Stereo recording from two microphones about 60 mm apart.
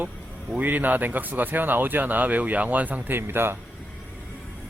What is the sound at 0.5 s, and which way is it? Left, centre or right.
Speech, right.